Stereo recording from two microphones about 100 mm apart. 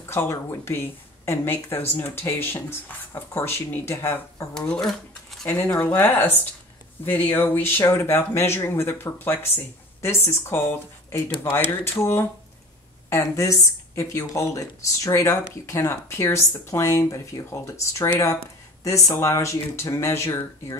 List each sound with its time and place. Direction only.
0.1 s speech: 25° left (ahead or behind)
4.8 s a sound: centre (ahead or behind)
5.5 s speech: 15° left (ahead or behind)